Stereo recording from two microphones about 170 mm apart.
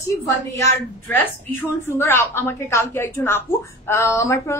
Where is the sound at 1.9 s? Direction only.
15° left (ahead or behind).